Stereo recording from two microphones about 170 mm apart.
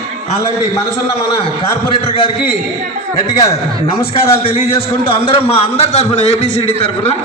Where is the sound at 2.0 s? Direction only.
35° left (ahead or behind).